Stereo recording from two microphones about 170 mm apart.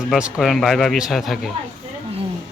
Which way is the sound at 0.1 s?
5° right (ahead or behind).